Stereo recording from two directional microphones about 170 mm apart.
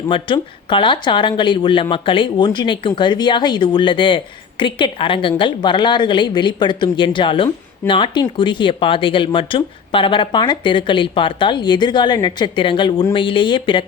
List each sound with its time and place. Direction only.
0.1 s speech: 30° left (ahead or behind)